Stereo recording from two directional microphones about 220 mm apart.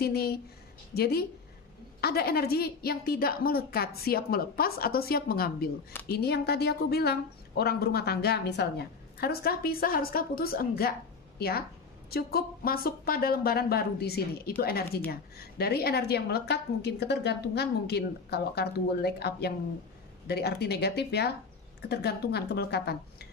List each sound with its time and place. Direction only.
0.0 s a woman's voice: 45° left (ahead or behind)